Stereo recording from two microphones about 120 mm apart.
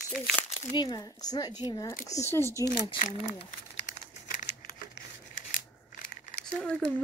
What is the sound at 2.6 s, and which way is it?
Speech, 35° left (ahead or behind).